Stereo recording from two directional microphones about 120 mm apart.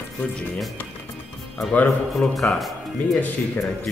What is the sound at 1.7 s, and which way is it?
Speech, 15° left (ahead or behind).